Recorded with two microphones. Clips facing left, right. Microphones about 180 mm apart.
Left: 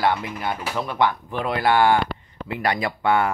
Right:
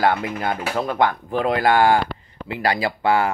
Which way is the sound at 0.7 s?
45° right (ahead or behind).